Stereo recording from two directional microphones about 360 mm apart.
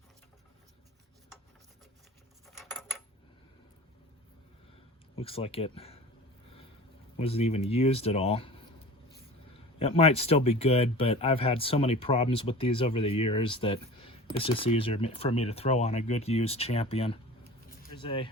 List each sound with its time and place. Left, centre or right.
2.5 s cutlery: centre
5.1 s speech: centre
7.2 s speech: centre
9.7 s speech: centre